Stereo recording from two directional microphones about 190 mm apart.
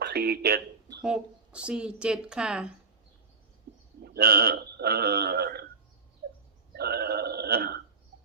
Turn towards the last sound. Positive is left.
turn(degrees=-55)  # may be behind; listen again after turning